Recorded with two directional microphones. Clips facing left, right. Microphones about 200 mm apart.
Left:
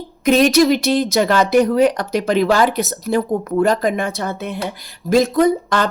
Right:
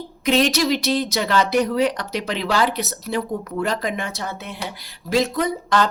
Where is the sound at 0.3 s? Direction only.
50° left (ahead or behind).